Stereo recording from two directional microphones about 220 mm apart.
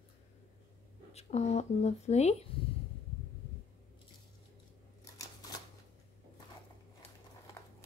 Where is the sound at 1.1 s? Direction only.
30° left (ahead or behind).